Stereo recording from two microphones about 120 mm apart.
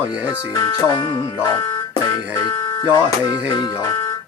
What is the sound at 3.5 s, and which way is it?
Speech, 40° left (ahead or behind).